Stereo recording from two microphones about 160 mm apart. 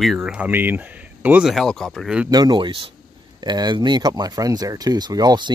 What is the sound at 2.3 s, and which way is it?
Speech, 25° right (ahead or behind).